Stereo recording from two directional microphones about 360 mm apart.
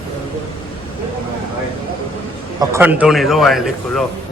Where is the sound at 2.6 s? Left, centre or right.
Centre.